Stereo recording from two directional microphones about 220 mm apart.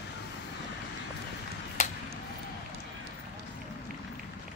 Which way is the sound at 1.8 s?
35° left (ahead or behind).